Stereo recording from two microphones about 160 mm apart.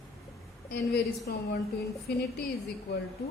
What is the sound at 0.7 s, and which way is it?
Speech, 90° left.